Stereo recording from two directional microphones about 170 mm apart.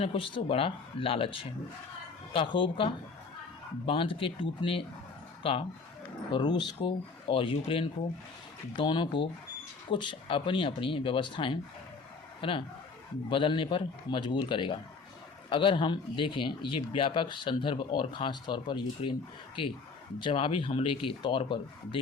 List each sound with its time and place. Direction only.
0.0 s a man's voice: 30° left (ahead or behind)
20.2 s speech: 30° left (ahead or behind)